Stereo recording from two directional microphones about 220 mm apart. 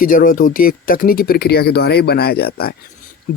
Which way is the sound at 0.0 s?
40° left (ahead or behind).